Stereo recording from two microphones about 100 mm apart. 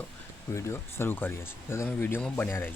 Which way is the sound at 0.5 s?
25° left (ahead or behind).